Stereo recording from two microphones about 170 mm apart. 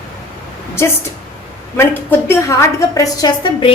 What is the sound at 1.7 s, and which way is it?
A woman's voice, 15° left (ahead or behind).